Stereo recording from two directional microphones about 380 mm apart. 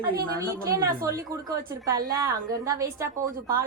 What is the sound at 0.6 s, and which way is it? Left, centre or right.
A woman's voice, centre.